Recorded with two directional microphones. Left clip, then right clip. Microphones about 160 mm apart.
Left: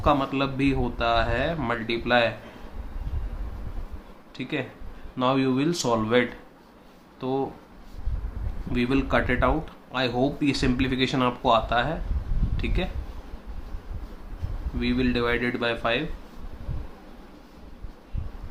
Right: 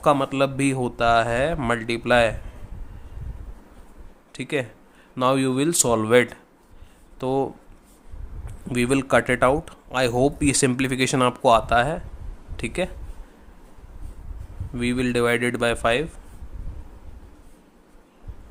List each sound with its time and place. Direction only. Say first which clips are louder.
0.0 s speech: right 4 dB; 90° right
4.4 s speech: right 5 dB; 90° right
5.1 s speech: right 3 dB; 75° right (ahead or behind)
8.7 s speech: right 4 dB; 90° right
14.8 s speech: right 3 dB; 90° right